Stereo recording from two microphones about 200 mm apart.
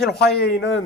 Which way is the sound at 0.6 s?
55° left (ahead or behind).